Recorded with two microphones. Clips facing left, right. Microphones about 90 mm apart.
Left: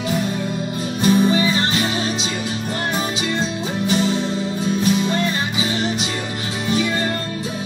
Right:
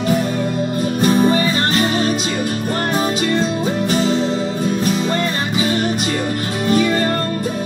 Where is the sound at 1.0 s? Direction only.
45° right (ahead or behind).